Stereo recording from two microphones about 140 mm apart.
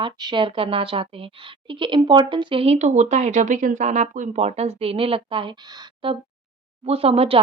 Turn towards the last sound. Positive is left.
turn(degrees=-40)  # may be behind; listen again after turning